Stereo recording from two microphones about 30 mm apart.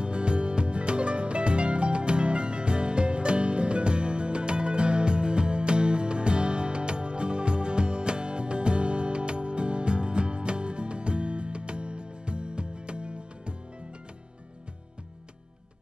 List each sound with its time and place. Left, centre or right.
0.0 s music: right